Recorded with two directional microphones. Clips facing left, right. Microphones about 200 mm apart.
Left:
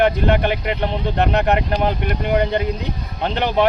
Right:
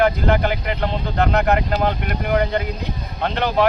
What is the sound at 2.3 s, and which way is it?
Speech, 25° left (ahead or behind).